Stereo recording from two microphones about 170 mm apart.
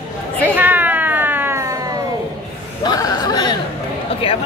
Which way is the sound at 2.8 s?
25° left (ahead or behind).